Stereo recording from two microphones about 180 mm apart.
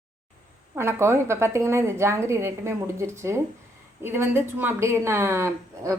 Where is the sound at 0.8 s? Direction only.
15° right (ahead or behind).